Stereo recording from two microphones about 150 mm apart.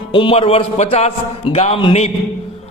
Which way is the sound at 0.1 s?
35° left (ahead or behind).